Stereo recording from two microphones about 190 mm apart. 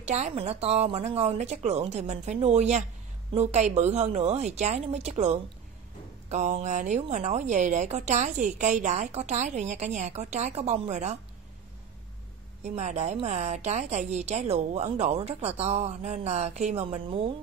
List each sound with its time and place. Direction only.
0.0 s a woman's voice: 35° right (ahead or behind)
12.6 s a woman's voice: 35° right (ahead or behind)